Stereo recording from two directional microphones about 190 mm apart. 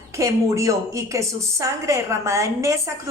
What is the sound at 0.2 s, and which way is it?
A woman's voice, 15° right (ahead or behind).